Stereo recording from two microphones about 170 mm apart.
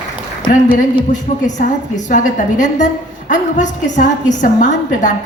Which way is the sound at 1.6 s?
45° left (ahead or behind).